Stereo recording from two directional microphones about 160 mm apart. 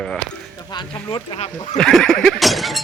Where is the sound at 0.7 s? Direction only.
30° left (ahead or behind).